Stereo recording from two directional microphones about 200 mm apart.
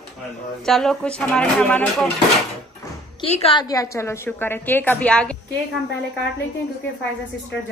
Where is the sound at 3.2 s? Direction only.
30° left (ahead or behind).